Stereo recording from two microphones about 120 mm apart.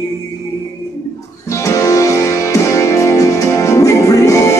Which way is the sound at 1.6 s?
25° left (ahead or behind).